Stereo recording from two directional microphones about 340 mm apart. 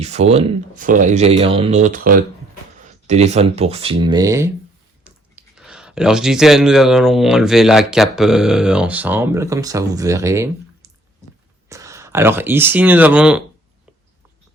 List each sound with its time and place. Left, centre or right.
0.0 s speech: centre
11.7 s speech: centre